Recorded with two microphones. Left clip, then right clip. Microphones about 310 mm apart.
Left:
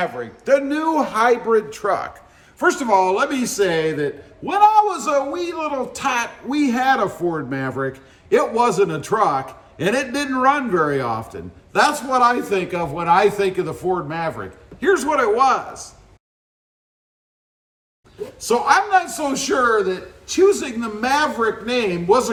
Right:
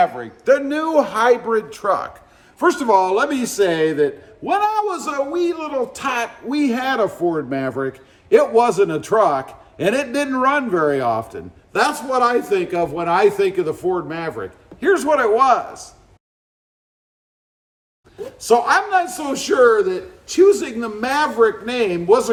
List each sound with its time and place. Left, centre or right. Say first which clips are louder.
0.0 s a man's voice: right 6 dB; centre
18.3 s a man's voice: right 1 dB; centre